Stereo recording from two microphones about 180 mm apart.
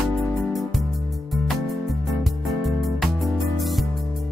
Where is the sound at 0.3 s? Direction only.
Centre (ahead or behind).